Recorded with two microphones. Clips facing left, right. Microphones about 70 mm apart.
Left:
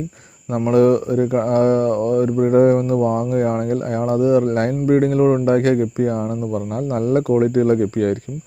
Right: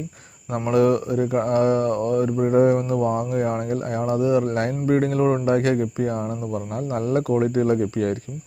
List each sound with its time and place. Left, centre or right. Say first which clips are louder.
0.7 s speech: left 4 dB; left
7.8 s speech: left 4 dB; left